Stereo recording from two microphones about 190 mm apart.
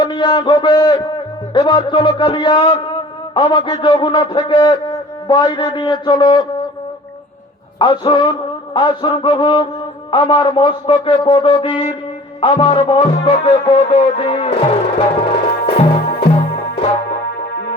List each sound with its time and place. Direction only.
0.0 s a man's voice: 20° left (ahead or behind)
7.8 s a man's voice: 25° left (ahead or behind)
12.4 s music: 30° left (ahead or behind)